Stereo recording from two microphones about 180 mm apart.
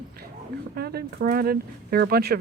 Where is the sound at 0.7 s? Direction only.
60° right (ahead or behind).